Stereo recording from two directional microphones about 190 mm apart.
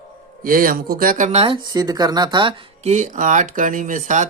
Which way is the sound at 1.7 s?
20° right (ahead or behind).